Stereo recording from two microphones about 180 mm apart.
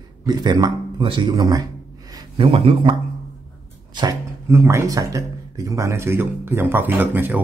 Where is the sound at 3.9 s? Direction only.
15° right (ahead or behind).